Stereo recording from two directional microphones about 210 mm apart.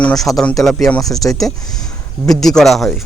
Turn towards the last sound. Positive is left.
turn(degrees=0)  # may be behind; listen again after turning